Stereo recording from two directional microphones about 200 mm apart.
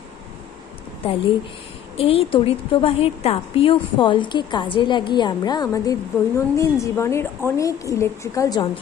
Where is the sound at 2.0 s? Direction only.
30° left (ahead or behind).